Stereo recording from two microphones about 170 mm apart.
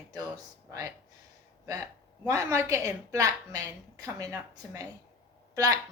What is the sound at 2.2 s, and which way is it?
A woman's voice, 15° right (ahead or behind).